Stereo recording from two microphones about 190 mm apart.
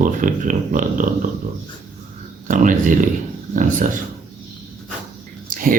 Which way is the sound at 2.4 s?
45° right (ahead or behind).